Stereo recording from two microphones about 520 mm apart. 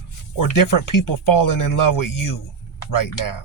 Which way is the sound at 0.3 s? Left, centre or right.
Left.